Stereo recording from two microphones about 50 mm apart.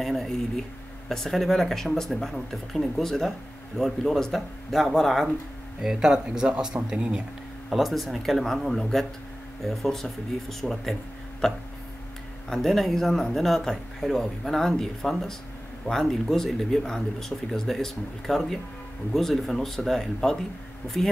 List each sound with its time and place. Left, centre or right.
0.0 s speech: centre
5.8 s speech: centre
7.7 s speech: centre